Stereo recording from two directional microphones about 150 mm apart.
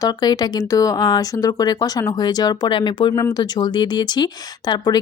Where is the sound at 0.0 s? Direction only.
25° left (ahead or behind).